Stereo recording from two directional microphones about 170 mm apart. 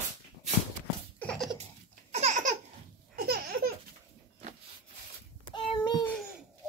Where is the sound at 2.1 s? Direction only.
40° right (ahead or behind).